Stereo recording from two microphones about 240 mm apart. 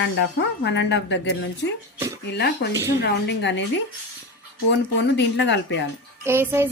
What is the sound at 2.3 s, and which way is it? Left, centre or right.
A woman's voice, left.